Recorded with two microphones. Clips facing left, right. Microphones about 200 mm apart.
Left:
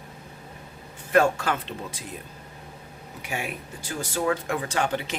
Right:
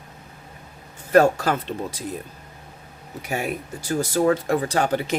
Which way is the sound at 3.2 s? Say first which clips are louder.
Right 6 dB; 40° right (ahead or behind).